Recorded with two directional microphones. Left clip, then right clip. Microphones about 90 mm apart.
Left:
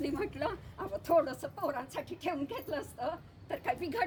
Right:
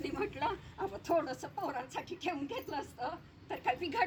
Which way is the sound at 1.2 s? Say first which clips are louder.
Left 3 dB; 35° left (ahead or behind).